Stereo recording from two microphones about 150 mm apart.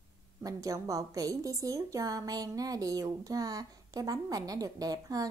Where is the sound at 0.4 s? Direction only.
25° right (ahead or behind).